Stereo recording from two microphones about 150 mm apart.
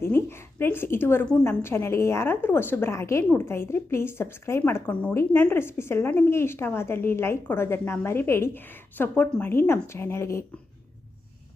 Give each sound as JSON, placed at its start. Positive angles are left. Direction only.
{"t": 0.0, "sound": "a woman's voice", "side_deg": 15}